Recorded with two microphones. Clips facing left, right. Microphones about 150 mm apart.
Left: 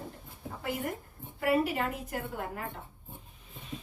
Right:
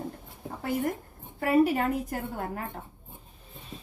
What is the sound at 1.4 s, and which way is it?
A woman's voice, 45° right (ahead or behind).